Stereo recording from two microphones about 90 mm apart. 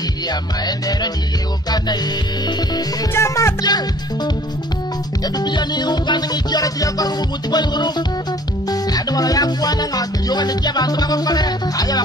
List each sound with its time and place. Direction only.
0.3 s music: 50° left (ahead or behind)
2.4 s music: 50° left (ahead or behind)
3.2 s speech: 35° left (ahead or behind)
3.6 s music: 50° left (ahead or behind)